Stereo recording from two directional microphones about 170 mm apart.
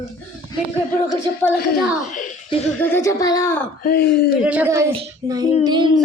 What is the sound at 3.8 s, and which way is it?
Speech, 65° left (ahead or behind).